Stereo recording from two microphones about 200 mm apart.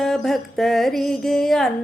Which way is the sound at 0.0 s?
Centre (ahead or behind).